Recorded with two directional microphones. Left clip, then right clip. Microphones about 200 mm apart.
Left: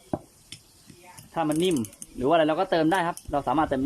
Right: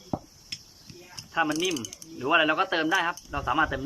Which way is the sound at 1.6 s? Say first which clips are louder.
Left 3 dB; 25° left (ahead or behind).